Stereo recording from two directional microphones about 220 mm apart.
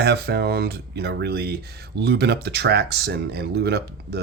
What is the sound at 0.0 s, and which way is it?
Speech, 50° right (ahead or behind).